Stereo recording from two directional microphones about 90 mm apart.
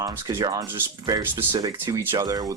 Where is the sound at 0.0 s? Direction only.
40° right (ahead or behind).